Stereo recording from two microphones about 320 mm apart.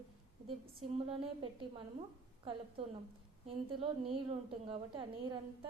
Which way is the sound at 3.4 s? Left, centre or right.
Centre.